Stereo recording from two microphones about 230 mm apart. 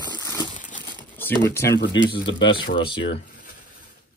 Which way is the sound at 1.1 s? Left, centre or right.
Centre.